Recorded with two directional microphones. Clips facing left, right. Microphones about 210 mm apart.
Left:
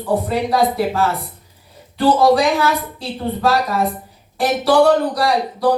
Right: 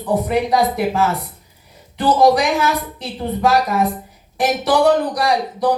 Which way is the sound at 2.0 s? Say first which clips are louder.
Left 1 dB; 15° right (ahead or behind).